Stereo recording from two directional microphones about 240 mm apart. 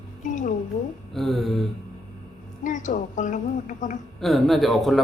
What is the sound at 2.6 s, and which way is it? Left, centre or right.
A woman's voice, left.